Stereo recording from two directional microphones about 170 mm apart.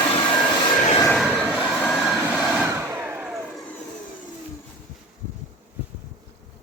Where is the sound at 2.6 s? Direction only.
15° right (ahead or behind).